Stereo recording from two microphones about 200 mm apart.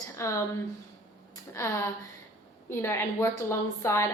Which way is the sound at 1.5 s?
15° left (ahead or behind).